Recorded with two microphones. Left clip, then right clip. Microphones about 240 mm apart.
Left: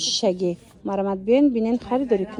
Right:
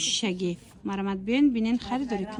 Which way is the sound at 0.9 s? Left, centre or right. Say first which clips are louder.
Left 9 dB; centre.